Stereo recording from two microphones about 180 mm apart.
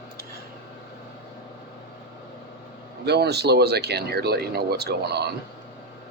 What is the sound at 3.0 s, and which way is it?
Speech, 65° right (ahead or behind).